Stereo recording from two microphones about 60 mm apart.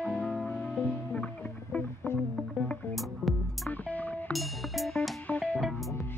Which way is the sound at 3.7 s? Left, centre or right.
Left.